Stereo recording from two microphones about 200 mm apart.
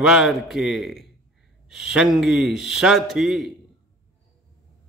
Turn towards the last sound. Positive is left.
turn(degrees=0)  # may be behind; listen again after turning